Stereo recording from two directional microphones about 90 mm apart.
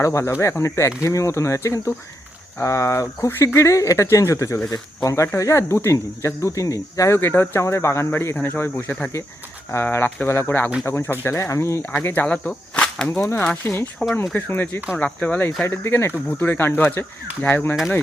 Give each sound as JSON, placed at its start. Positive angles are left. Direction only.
{"t": 0.0, "sound": "speech", "side_deg": 35}
{"t": 11.8, "sound": "whip", "side_deg": 20}
{"t": 13.6, "sound": "speech", "side_deg": 25}
{"t": 14.0, "sound": "speech", "side_deg": 10}
{"t": 14.3, "sound": "speech", "side_deg": 20}